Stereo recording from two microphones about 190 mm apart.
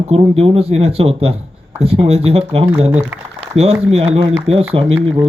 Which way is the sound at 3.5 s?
35° right (ahead or behind).